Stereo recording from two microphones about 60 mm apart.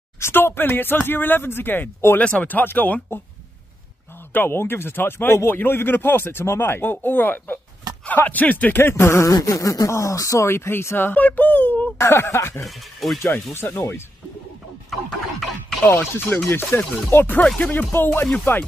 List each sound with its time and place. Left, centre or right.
0.2 s speech: left
2.1 s speech: left
4.3 s speech: left
7.9 s a sound: right
8.3 s speech: left
9.3 s speech: left
10.5 s speech: left
12.0 s speech: left
12.6 s speech: centre
13.7 s speech: left
15.8 s speech: left